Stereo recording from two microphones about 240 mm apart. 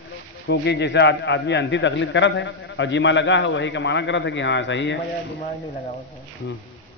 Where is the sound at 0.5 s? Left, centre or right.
Left.